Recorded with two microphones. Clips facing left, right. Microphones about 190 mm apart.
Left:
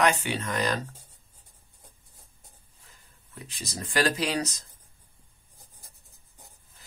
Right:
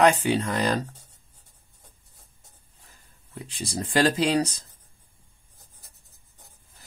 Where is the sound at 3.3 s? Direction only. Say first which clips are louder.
Right 6 dB; 30° right (ahead or behind).